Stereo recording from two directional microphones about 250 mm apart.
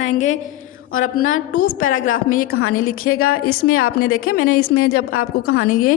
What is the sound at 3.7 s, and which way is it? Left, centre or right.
A woman's voice, left.